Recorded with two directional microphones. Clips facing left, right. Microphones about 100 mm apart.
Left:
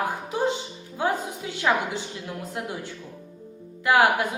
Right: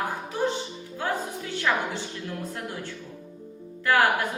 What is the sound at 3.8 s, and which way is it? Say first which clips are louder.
Speech: left 2 dB; 15° left (ahead or behind).